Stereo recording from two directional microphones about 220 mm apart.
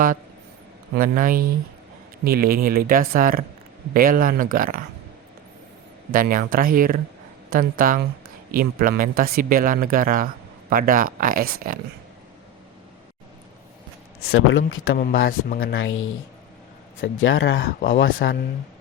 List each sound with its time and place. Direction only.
0.9 s speech: 40° right (ahead or behind)
6.1 s speech: 40° right (ahead or behind)
14.3 s speech: 70° left (ahead or behind)
15.4 s speech: 45° left (ahead or behind)
15.7 s speech: 60° left (ahead or behind)